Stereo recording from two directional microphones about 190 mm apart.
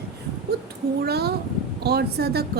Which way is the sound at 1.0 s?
55° right (ahead or behind).